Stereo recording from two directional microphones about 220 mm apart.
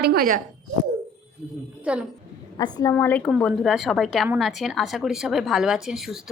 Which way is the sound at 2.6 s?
15° left (ahead or behind).